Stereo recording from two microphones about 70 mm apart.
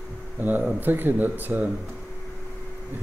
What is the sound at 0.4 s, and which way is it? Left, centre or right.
Speech, right.